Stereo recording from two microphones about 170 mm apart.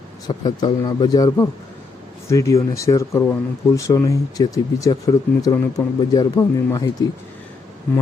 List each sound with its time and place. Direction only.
0.3 s speech: 25° left (ahead or behind)